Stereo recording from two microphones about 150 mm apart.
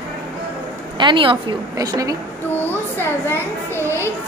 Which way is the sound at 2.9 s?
15° left (ahead or behind).